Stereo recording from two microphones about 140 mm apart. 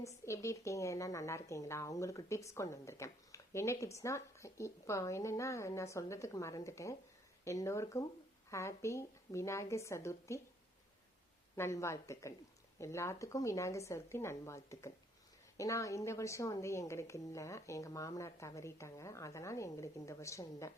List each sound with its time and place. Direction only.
0.3 s a woman's voice: 20° left (ahead or behind)
11.5 s a woman's voice: 20° left (ahead or behind)